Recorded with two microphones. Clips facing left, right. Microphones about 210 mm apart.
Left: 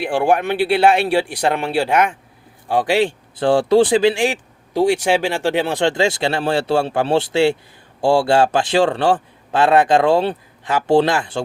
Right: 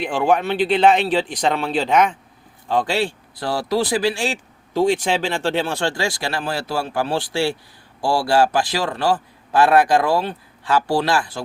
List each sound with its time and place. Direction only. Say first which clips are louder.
0.0 s a man's voice: left 2 dB; 10° left (ahead or behind)
3.4 s speech: left 8 dB; 30° left (ahead or behind)